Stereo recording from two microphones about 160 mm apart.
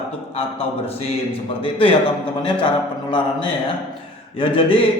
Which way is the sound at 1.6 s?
35° left (ahead or behind).